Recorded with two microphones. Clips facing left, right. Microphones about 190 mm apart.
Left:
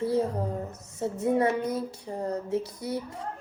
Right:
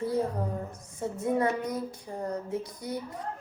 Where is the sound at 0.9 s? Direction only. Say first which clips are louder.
Left 3 dB; 25° left (ahead or behind).